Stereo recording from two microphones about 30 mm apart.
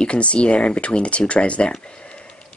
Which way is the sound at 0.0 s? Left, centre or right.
Left.